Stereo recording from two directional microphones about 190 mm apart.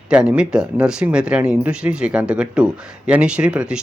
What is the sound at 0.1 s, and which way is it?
Speech, 5° right (ahead or behind).